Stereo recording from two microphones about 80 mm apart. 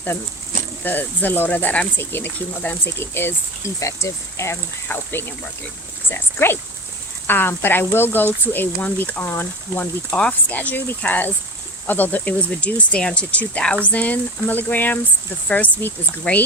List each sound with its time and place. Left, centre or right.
0.9 s speech: left
3.8 s speech: left
10.2 s speech: centre